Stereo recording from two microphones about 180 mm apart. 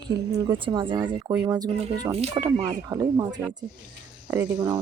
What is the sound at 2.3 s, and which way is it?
Speech, 20° right (ahead or behind).